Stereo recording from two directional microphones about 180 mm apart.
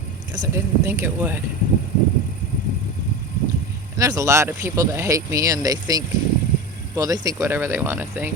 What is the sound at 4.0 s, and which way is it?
Speech, 20° right (ahead or behind).